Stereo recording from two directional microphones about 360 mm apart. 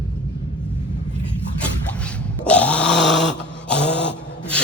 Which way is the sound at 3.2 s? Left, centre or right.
Left.